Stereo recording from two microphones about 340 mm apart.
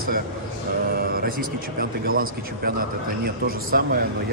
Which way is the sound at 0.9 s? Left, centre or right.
Right.